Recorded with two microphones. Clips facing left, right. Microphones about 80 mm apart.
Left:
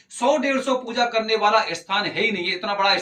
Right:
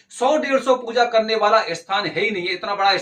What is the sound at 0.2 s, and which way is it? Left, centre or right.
A man's voice, right.